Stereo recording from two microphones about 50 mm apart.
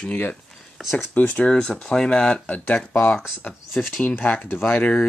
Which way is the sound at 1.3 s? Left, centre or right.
Centre.